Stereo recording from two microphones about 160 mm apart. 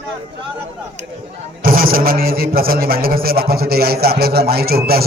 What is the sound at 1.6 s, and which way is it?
A man's voice, 65° right (ahead or behind).